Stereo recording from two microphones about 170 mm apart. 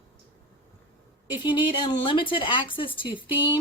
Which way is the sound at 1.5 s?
25° left (ahead or behind).